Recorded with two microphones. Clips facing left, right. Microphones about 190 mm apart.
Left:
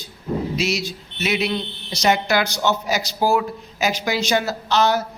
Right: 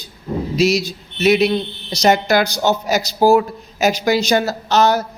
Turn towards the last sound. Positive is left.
turn(degrees=-45)  # may be behind; listen again after turning